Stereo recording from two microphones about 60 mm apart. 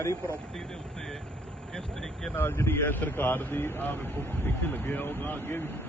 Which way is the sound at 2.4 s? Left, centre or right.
Left.